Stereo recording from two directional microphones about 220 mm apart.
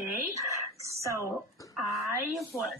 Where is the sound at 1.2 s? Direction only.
15° left (ahead or behind).